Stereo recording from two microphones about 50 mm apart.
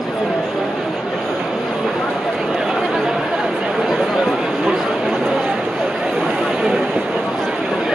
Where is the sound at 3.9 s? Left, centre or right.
Centre.